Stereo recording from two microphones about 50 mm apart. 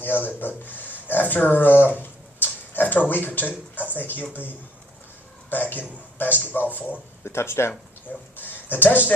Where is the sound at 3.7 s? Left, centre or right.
Left.